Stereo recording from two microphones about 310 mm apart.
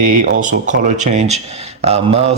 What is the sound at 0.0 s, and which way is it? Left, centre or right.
Speech, right.